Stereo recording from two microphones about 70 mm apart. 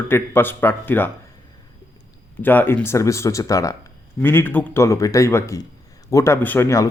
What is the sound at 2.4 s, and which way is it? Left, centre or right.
Speech, left.